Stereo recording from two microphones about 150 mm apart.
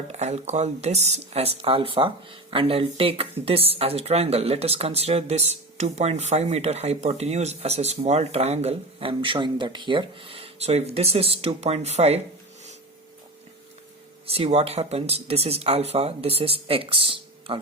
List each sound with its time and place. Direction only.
0.1 s speech: 50° right (ahead or behind)
14.3 s speech: 45° right (ahead or behind)